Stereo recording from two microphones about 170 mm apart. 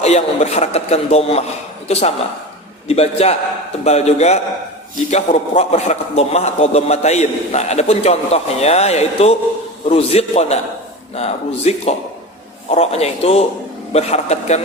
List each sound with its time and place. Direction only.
0.0 s a man's voice: 40° left (ahead or behind)